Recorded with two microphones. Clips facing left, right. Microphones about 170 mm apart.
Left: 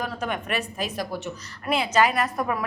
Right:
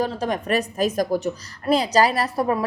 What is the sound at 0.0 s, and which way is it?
A woman's voice, 35° right (ahead or behind).